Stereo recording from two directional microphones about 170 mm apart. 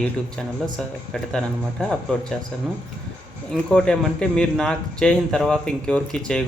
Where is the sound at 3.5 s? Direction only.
5° left (ahead or behind).